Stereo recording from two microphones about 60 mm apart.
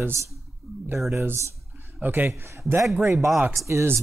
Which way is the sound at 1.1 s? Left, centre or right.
Right.